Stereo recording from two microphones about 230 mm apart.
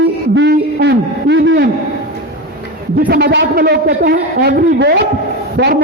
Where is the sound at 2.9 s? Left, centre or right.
Right.